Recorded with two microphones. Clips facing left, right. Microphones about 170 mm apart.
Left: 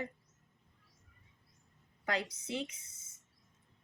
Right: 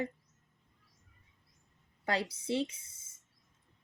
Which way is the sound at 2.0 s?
30° right (ahead or behind).